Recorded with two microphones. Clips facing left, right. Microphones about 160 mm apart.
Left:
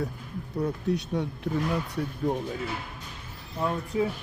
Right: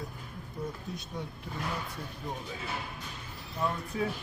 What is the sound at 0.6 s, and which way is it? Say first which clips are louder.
Speech: left 11 dB; 75° left (ahead or behind).